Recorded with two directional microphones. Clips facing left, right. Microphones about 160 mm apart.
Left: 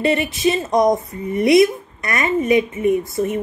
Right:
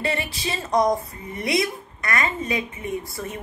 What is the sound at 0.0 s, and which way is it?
Speech, 20° left (ahead or behind).